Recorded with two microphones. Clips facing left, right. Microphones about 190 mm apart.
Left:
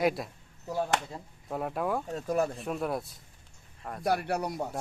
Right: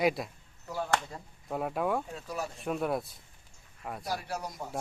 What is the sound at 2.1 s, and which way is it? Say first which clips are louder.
Speech: left 9 dB; 50° left (ahead or behind).